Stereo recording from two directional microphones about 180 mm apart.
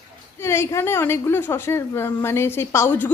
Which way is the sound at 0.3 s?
15° left (ahead or behind).